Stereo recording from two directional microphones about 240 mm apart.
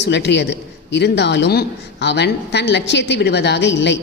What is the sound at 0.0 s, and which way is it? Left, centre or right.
A woman's voice, left.